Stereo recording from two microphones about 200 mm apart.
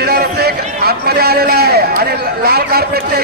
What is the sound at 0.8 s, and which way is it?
A man's voice, 50° right (ahead or behind).